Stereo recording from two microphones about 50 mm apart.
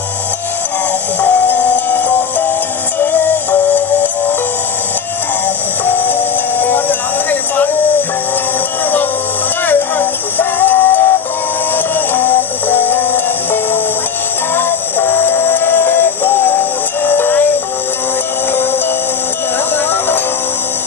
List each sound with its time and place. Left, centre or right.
1.2 s music: left
5.9 s music: left
9.7 s music: left
12.1 s music: left